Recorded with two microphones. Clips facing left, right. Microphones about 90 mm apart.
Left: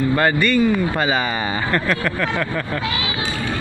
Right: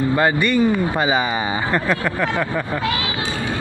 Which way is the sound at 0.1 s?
15° right (ahead or behind).